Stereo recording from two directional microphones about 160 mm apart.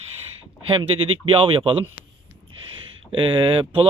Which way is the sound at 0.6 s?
35° right (ahead or behind).